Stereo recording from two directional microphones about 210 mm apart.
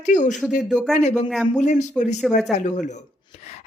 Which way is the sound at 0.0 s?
35° left (ahead or behind).